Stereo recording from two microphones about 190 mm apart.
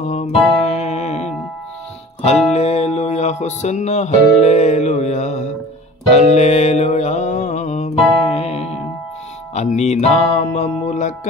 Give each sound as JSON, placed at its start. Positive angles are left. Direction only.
{"t": 0.0, "sound": "music", "side_deg": 35}